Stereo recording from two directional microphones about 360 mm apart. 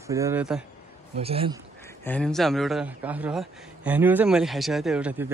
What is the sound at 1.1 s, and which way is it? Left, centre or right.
Speech, centre.